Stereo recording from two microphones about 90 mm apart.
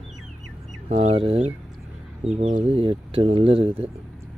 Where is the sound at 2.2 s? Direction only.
90° right.